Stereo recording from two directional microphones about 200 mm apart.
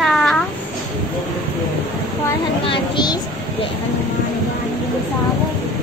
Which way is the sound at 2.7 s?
20° left (ahead or behind).